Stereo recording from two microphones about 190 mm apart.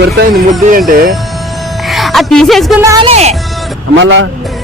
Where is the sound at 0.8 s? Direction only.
45° right (ahead or behind).